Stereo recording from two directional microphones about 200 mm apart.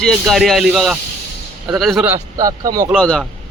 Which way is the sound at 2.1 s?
15° right (ahead or behind).